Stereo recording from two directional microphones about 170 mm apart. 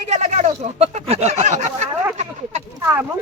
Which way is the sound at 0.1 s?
40° right (ahead or behind).